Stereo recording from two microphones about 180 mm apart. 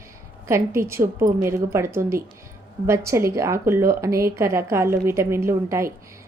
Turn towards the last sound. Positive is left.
turn(degrees=-15)  # may be behind; listen again after turning